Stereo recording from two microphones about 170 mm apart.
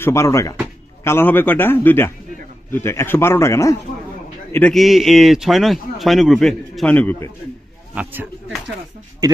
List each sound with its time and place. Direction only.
0.0 s a man's voice: 15° left (ahead or behind)
4.5 s speech: 5° left (ahead or behind)
7.9 s a man's voice: 10° right (ahead or behind)